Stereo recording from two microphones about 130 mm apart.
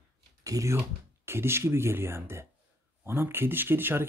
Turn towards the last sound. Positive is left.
turn(degrees=-15)  # may be behind; listen again after turning